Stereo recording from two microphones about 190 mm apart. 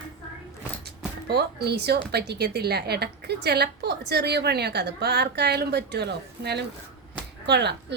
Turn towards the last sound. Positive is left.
turn(degrees=-65)  # may be behind; listen again after turning